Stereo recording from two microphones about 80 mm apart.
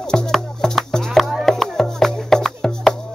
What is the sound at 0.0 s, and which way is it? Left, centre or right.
Music, centre.